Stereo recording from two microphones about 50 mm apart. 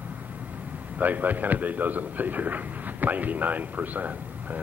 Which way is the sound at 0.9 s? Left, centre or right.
Right.